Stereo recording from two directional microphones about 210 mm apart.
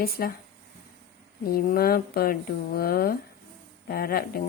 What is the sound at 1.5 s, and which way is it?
Speech, 45° left (ahead or behind).